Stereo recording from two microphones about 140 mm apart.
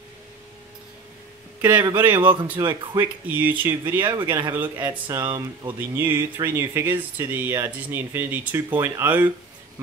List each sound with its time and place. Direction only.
1.6 s a man's voice: 15° right (ahead or behind)
2.6 s speech: 30° right (ahead or behind)
3.0 s speech: 15° right (ahead or behind)
4.2 s a man's voice: 30° right (ahead or behind)
5.8 s speech: 15° right (ahead or behind)